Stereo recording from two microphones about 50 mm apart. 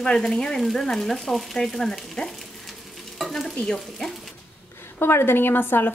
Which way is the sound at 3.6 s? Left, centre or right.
Centre.